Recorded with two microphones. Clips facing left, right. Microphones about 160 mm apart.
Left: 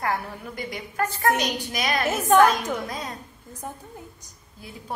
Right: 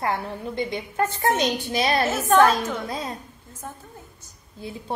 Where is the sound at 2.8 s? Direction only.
30° right (ahead or behind).